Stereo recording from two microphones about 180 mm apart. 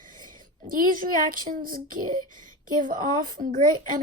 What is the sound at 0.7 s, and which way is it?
A child's voice, 50° right (ahead or behind).